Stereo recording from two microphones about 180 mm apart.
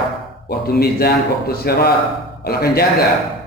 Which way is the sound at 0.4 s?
60° left (ahead or behind).